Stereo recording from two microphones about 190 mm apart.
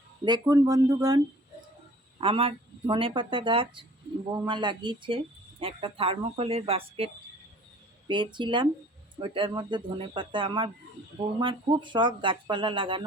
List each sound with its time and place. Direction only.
0.3 s speech: 20° right (ahead or behind)
2.2 s speech: 30° right (ahead or behind)